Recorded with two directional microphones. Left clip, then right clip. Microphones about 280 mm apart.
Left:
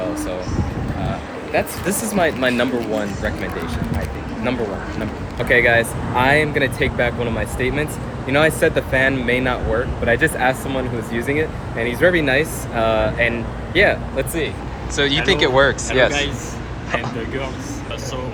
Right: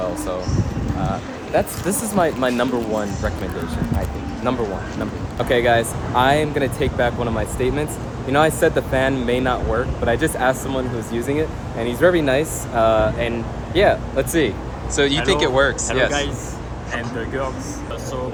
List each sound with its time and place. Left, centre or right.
1.5 s speech: centre
5.4 s speech: centre